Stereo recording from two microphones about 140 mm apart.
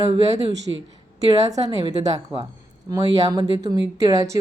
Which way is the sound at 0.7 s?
20° right (ahead or behind).